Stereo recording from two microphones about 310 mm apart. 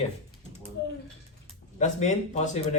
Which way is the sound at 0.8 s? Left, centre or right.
Left.